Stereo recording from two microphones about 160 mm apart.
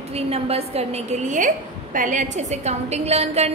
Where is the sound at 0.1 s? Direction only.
40° right (ahead or behind).